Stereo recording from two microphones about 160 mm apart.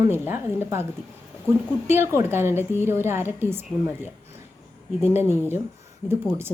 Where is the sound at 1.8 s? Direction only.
15° right (ahead or behind).